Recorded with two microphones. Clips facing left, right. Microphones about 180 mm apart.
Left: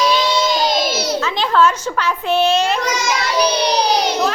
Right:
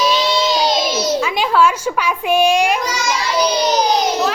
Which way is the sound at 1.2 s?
10° right (ahead or behind).